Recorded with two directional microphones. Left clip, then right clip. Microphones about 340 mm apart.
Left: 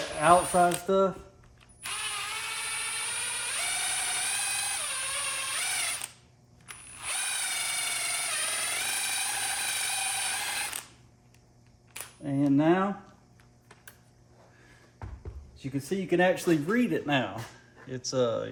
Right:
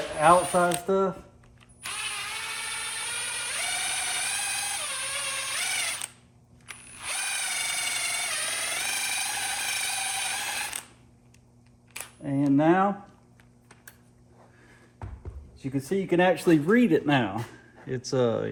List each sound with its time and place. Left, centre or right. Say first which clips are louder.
0.2 s speech: right 2 dB; centre
1.8 s a sound: right 1 dB; centre
6.7 s drill: right 2 dB; centre
11.9 s camera: right 1 dB; centre
15.6 s speech: right 4 dB; centre; by 18.4 s right